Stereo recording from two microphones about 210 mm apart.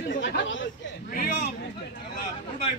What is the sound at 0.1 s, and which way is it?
Chatter, 60° left (ahead or behind).